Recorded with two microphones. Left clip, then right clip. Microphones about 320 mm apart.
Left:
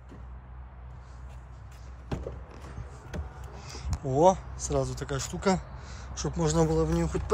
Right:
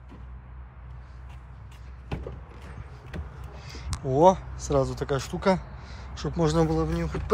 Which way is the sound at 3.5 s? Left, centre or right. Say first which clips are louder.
Even; centre.